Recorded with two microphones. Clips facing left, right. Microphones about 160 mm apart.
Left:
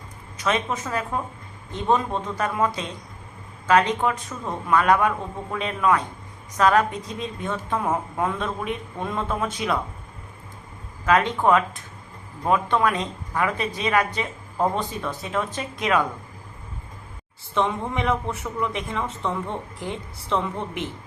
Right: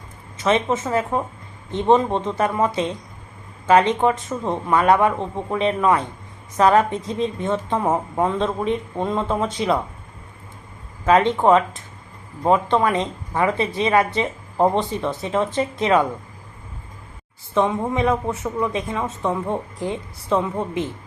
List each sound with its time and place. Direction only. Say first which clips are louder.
0.3 s speech: right 5 dB; 25° right (ahead or behind)
11.0 s speech: right 4 dB; 20° right (ahead or behind)
17.5 s speech: right 4 dB; 15° right (ahead or behind)